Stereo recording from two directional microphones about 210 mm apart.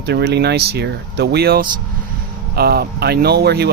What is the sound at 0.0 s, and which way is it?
Speech, 50° right (ahead or behind).